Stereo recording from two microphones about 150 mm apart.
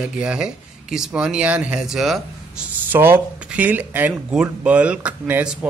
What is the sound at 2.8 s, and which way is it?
Speech, 15° right (ahead or behind).